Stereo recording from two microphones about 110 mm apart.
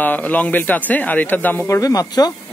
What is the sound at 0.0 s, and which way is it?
A man's voice, 15° left (ahead or behind).